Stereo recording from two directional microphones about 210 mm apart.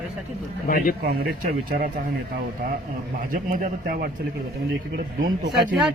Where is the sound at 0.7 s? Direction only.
40° left (ahead or behind).